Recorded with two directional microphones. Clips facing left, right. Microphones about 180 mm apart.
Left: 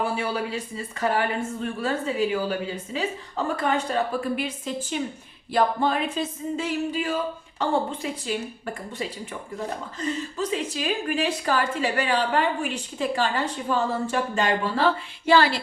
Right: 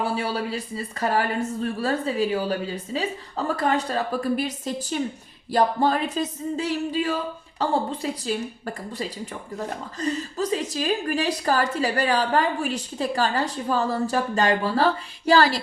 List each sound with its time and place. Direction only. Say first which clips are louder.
0.2 s a woman's voice: right 1 dB; 35° right (ahead or behind)